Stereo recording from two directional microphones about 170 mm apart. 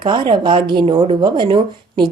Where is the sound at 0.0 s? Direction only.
30° right (ahead or behind).